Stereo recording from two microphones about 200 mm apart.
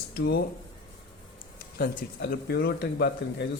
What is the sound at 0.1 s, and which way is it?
Speech, 55° left (ahead or behind).